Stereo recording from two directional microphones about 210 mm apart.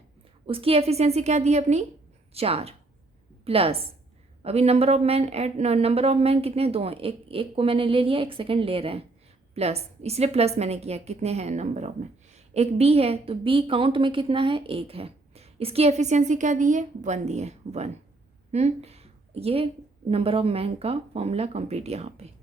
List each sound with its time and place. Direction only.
0.4 s a woman's voice: 25° right (ahead or behind)